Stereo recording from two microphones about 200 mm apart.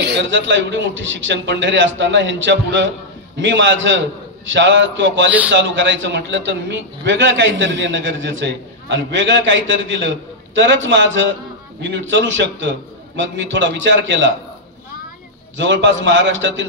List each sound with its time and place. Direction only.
0.0 s a man's voice: 65° right (ahead or behind)
15.5 s a man's voice: 65° right (ahead or behind)